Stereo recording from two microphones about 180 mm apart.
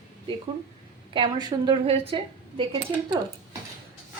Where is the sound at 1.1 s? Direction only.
25° right (ahead or behind).